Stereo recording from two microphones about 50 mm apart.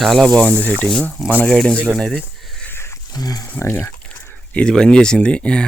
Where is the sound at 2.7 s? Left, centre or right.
Left.